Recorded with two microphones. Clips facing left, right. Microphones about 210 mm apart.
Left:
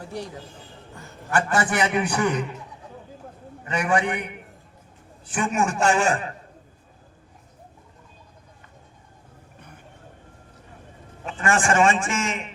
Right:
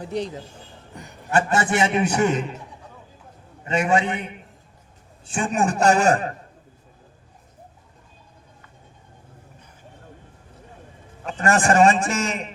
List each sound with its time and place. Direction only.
0.0 s a man's voice: 20° right (ahead or behind)
3.7 s a man's voice: 25° right (ahead or behind); by 6.3 s 40° right (ahead or behind)
11.3 s a man's voice: 40° right (ahead or behind)